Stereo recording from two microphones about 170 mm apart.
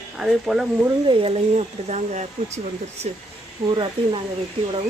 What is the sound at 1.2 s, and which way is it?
Speech, 40° right (ahead or behind).